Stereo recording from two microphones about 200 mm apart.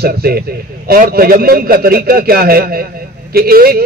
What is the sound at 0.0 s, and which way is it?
A man's voice, 50° right (ahead or behind).